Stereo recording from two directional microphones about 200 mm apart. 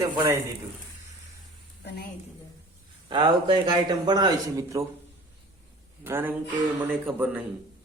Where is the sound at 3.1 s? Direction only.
25° right (ahead or behind).